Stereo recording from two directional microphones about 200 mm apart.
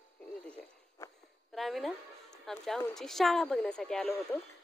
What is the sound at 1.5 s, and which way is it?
A woman's voice, centre (ahead or behind).